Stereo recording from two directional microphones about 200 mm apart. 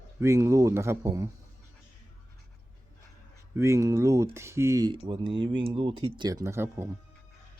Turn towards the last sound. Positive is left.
turn(degrees=-15)  # may be behind; listen again after turning